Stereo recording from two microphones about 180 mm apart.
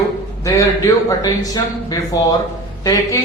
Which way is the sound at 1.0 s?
20° left (ahead or behind).